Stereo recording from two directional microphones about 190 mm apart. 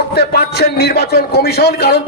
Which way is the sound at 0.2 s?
55° left (ahead or behind).